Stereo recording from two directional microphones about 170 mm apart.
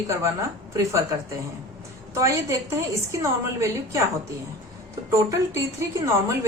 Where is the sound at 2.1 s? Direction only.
15° right (ahead or behind).